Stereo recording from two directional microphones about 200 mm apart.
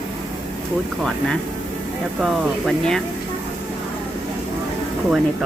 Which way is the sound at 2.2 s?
Centre (ahead or behind).